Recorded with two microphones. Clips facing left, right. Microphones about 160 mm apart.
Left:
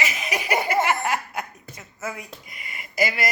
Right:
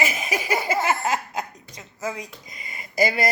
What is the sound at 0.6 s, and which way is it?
Speech, 25° right (ahead or behind).